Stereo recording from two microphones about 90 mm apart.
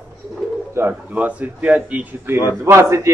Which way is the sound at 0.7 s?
20° right (ahead or behind).